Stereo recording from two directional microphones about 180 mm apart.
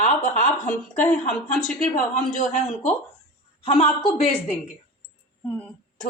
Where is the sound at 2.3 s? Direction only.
40° left (ahead or behind).